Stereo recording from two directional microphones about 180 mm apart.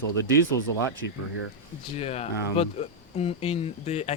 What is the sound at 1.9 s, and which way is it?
Speech, 35° left (ahead or behind).